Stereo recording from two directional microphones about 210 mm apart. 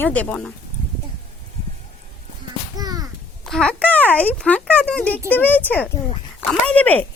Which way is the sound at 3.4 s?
5° left (ahead or behind).